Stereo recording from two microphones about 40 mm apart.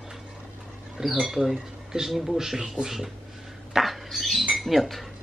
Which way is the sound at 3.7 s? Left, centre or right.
Centre.